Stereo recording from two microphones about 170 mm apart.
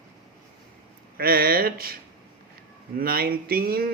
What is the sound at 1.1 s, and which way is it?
Speech, 60° right (ahead or behind).